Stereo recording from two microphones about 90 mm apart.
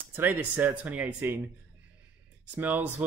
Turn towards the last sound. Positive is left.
turn(degrees=-20)  # may be behind; listen again after turning